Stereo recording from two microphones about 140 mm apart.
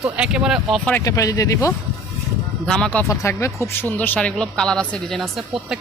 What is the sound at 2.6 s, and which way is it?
Speech, 5° left (ahead or behind).